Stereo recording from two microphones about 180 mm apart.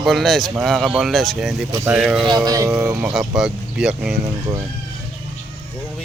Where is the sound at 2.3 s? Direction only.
20° right (ahead or behind); by 4.1 s 5° right (ahead or behind).